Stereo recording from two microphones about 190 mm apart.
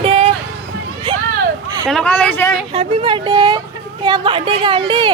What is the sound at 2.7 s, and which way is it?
A woman's voice, 30° right (ahead or behind).